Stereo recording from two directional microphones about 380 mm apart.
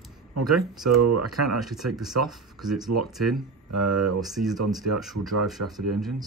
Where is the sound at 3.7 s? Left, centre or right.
Right.